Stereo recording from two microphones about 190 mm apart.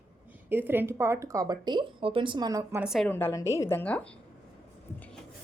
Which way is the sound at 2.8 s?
5° right (ahead or behind).